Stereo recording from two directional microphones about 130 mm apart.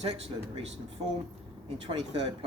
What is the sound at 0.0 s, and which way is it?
Speech, 50° right (ahead or behind).